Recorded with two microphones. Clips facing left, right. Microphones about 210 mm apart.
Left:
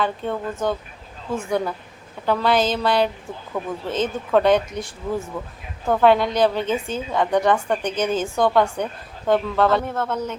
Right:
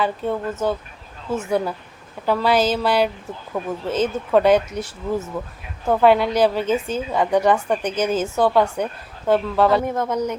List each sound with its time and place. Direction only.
0.0 s a woman's voice: 5° right (ahead or behind)